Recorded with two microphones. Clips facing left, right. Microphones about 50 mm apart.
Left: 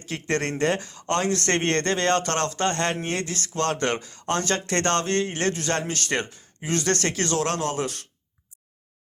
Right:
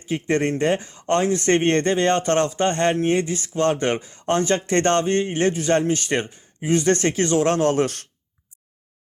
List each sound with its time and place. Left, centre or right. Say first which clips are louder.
0.0 s speech: right 5 dB; centre; by 8.0 s right